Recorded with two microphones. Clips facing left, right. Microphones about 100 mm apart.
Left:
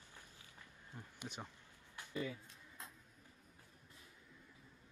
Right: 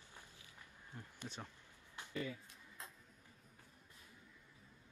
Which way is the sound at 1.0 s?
15° left (ahead or behind).